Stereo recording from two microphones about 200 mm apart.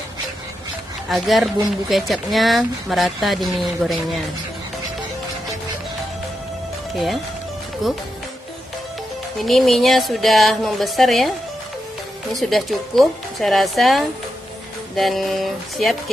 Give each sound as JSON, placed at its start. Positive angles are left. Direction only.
{"t": 1.0, "sound": "speech", "side_deg": 0}
{"t": 7.8, "sound": "speech", "side_deg": 0}
{"t": 9.4, "sound": "speech", "side_deg": 0}
{"t": 12.4, "sound": "speech", "side_deg": 0}